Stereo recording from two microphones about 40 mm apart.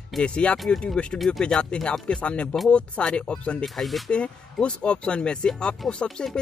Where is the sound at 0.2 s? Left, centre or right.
Left.